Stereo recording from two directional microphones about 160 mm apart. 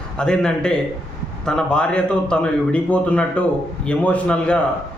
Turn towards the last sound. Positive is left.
turn(degrees=5)  # may be behind; listen again after turning